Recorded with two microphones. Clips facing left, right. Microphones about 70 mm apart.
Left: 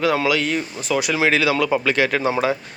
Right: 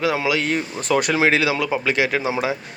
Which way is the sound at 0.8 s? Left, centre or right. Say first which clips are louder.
Right 4 dB; right.